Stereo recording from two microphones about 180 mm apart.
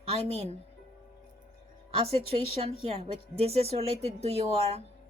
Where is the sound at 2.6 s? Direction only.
35° right (ahead or behind).